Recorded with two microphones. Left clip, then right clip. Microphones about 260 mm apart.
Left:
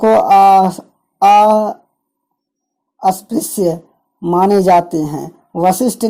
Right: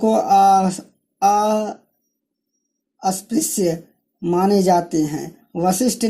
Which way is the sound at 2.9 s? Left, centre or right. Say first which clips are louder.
Left 6 dB; left.